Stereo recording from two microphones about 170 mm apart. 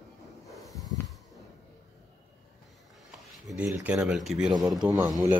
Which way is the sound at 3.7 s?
15° right (ahead or behind).